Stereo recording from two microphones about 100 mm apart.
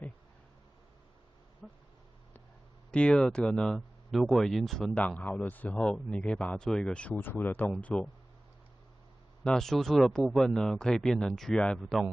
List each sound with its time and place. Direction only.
1.6 s a sound: centre (ahead or behind)
2.9 s speech: 10° left (ahead or behind)
9.4 s speech: 5° left (ahead or behind)